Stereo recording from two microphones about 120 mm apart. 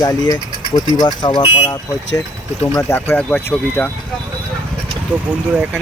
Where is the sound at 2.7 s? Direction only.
20° left (ahead or behind).